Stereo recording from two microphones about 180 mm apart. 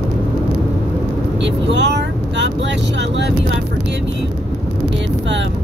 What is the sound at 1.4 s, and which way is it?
Speech, 75° right (ahead or behind).